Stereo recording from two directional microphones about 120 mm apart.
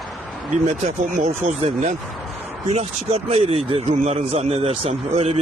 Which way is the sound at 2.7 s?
65° right (ahead or behind).